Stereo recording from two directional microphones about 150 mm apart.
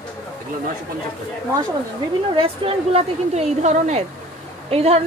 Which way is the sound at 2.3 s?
40° right (ahead or behind).